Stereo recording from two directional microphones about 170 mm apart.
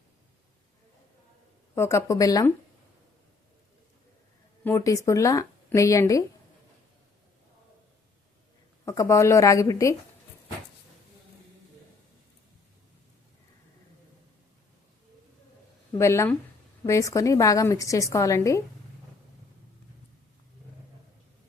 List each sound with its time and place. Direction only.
1.7 s a woman's voice: 15° left (ahead or behind)
4.6 s a woman's voice: 20° left (ahead or behind)
8.8 s a woman's voice: 20° left (ahead or behind)
16.0 s a woman's voice: 15° left (ahead or behind)